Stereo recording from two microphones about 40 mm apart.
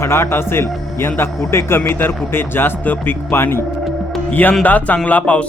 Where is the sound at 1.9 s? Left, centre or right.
Left.